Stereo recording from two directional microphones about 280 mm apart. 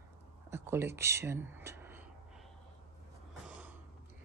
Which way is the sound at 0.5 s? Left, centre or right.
Centre.